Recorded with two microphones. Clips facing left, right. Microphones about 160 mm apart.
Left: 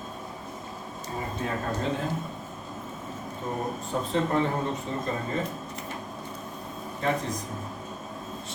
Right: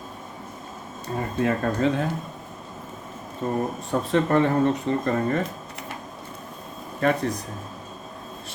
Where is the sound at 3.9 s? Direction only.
60° right (ahead or behind).